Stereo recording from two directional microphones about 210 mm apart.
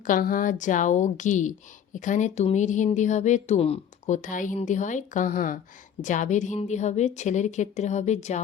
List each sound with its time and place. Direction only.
0.0 s speech: 40° left (ahead or behind)